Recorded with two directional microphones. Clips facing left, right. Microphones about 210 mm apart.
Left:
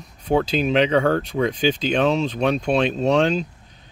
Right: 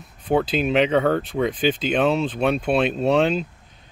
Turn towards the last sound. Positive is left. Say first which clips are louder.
# even
turn(degrees=-5)  # may be behind; listen again after turning